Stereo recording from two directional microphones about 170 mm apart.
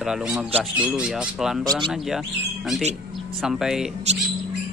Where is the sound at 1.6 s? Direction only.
20° right (ahead or behind).